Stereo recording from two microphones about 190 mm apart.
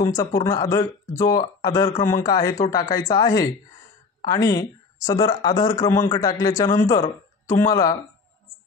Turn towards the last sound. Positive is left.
turn(degrees=20)  # may be behind; listen again after turning